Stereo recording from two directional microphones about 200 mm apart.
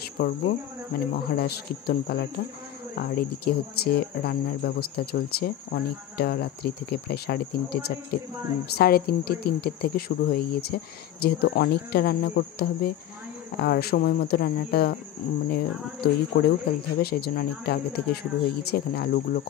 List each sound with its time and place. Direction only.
0.0 s speech: 50° left (ahead or behind)